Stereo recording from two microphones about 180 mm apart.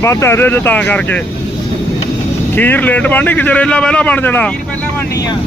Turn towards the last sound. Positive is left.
turn(degrees=10)  # may be behind; listen again after turning